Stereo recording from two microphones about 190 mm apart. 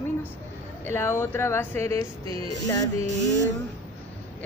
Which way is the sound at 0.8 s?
15° left (ahead or behind).